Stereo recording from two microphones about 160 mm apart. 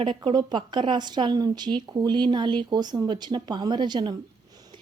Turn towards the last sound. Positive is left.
turn(degrees=-30)  # may be behind; listen again after turning